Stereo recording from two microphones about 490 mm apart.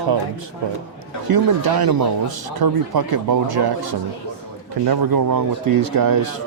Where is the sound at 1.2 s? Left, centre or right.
Right.